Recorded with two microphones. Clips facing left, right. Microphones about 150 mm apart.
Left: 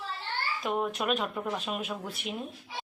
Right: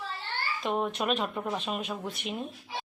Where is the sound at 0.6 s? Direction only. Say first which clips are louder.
Right 1 dB; centre (ahead or behind).